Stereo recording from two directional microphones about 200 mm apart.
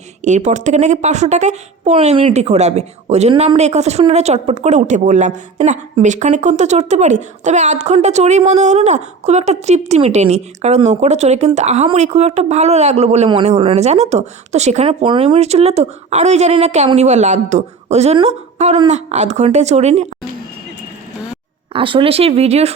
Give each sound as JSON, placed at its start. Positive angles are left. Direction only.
{"t": 0.3, "sound": "speech", "side_deg": -35}
{"t": 21.7, "sound": "speech", "side_deg": -25}